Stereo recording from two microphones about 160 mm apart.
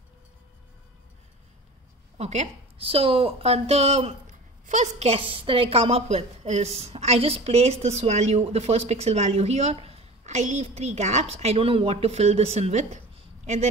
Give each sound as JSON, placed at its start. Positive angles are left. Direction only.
{"t": 2.1, "sound": "a woman's voice", "side_deg": -45}